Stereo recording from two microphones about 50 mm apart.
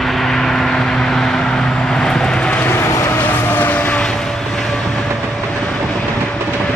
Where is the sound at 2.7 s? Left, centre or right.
Left.